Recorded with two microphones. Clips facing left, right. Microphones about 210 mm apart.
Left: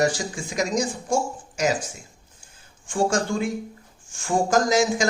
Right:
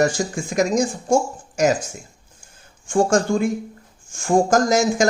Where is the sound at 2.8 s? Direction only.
45° right (ahead or behind).